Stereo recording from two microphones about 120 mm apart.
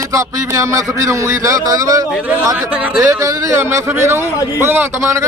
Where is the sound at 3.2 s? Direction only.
25° right (ahead or behind).